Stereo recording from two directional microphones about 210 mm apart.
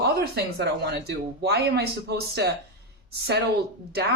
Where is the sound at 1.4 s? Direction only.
50° right (ahead or behind).